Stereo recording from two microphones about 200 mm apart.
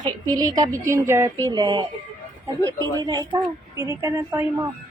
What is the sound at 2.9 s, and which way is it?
Speech, 20° right (ahead or behind).